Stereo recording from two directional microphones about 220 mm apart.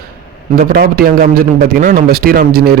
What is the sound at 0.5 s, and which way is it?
A man's voice, 45° right (ahead or behind).